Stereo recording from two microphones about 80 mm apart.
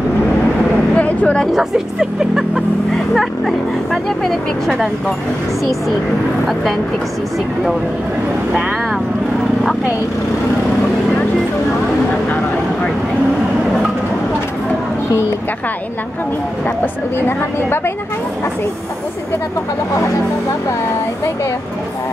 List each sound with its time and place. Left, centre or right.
0.9 s vehicle: centre
1.4 s speech: centre
16.6 s speech: left